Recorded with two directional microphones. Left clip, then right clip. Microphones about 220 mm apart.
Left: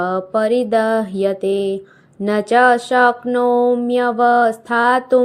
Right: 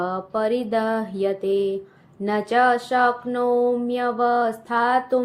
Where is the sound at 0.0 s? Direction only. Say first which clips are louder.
Left 6 dB; 30° left (ahead or behind).